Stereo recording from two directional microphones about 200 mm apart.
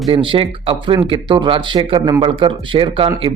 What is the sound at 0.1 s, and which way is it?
Speech, 25° right (ahead or behind).